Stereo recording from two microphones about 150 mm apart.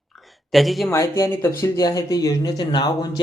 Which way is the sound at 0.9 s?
20° left (ahead or behind).